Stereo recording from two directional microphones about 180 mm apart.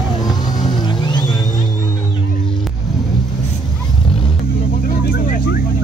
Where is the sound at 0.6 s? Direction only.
25° left (ahead or behind).